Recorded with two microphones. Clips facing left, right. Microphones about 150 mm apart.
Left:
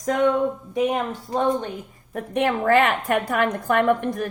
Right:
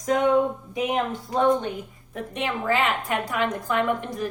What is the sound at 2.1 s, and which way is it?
A woman's voice, 55° left (ahead or behind).